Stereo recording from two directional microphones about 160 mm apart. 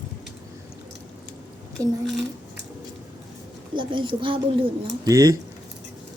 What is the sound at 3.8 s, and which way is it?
Speech, 30° right (ahead or behind).